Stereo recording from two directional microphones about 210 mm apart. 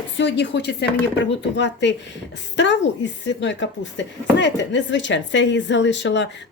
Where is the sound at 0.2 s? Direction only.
55° left (ahead or behind).